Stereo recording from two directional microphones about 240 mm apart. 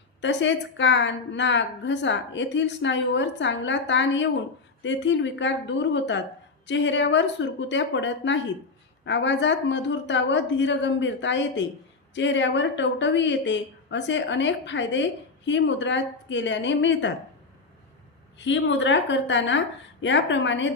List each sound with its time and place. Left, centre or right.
0.2 s a woman's voice: left
18.3 s a woman's voice: left